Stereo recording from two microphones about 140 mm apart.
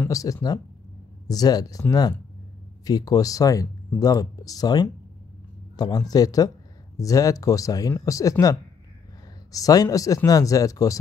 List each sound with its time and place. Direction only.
0.0 s speech: 25° left (ahead or behind)